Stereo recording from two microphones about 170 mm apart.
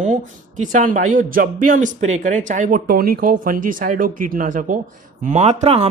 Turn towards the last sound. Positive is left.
turn(degrees=-40)  # may be behind; listen again after turning